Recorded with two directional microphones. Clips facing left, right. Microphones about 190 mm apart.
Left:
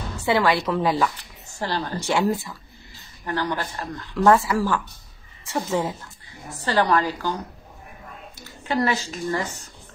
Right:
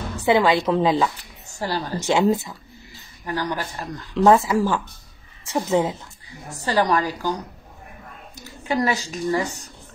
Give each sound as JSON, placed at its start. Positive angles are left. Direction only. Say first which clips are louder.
{"t": 0.2, "sound": "speech", "louder": "right 3 dB", "side_deg": -20}
{"t": 8.6, "sound": "speech", "louder": "right 1 dB", "side_deg": -15}